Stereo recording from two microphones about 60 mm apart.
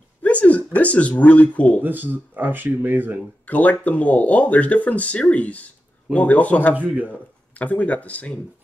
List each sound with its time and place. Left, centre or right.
0.2 s speech: left
1.8 s speech: right
3.4 s speech: left
6.7 s speech: right
7.1 s speech: left